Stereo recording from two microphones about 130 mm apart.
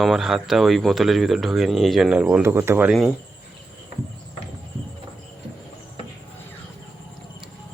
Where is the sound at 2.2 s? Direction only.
15° right (ahead or behind).